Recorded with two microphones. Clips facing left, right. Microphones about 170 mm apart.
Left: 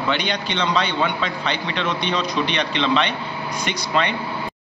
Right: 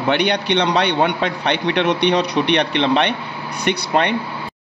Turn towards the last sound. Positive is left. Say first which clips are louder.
# right 4 dB
turn(degrees=-60)  # may be behind; listen again after turning